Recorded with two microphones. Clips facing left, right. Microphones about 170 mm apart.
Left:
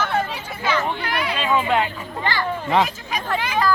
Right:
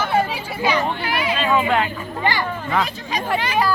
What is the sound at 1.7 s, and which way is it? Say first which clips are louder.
Music: even; 20° left (ahead or behind).